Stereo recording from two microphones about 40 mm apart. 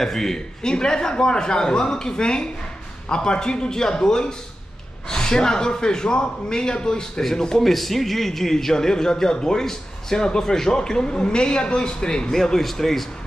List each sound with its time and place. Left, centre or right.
0.0 s a man's voice: centre
7.6 s a man's voice: centre